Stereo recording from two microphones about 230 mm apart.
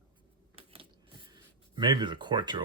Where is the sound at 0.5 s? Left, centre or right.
Right.